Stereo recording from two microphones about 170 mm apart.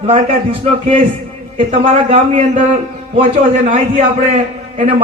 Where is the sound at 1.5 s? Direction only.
45° right (ahead or behind).